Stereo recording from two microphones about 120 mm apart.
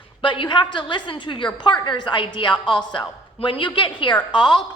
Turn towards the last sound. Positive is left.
turn(degrees=40)  # may be behind; listen again after turning